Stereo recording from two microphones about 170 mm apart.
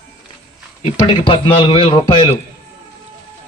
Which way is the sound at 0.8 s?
30° left (ahead or behind).